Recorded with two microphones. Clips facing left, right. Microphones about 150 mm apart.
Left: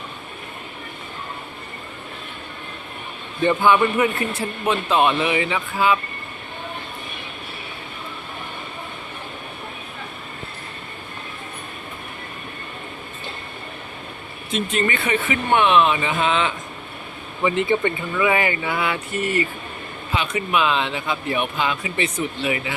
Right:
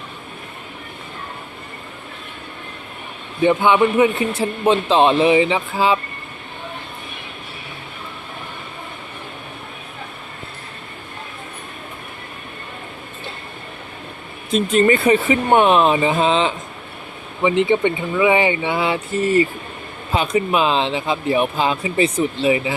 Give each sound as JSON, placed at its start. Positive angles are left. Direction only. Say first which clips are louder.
{"t": 3.4, "sound": "speech", "louder": "right 2 dB", "side_deg": -15}
{"t": 14.5, "sound": "speech", "louder": "right 8 dB", "side_deg": -35}
{"t": 17.4, "sound": "speech", "louder": "right 4 dB", "side_deg": -15}